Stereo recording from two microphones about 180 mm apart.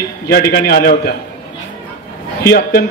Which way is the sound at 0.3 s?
60° left (ahead or behind).